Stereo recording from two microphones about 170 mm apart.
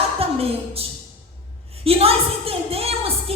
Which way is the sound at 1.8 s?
35° right (ahead or behind).